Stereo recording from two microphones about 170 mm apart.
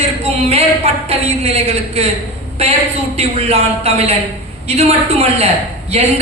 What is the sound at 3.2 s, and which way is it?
A man's voice, 35° right (ahead or behind).